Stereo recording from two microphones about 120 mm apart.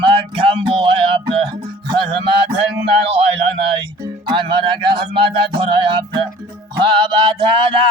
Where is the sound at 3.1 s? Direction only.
55° right (ahead or behind).